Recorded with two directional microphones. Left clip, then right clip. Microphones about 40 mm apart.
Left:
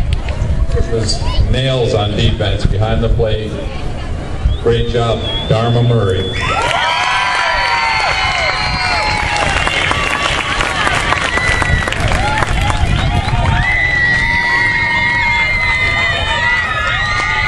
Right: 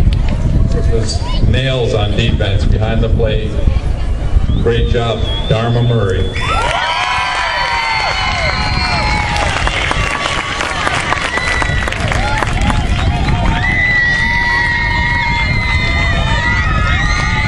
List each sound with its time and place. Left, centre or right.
1.6 s a man's voice: right
4.6 s a man's voice: right
5.8 s a man's voice: right
6.8 s crowd: centre
8.5 s crowd: centre
9.5 s applause: centre; by 11.0 s left
13.7 s crowd: centre
17.1 s crowd: left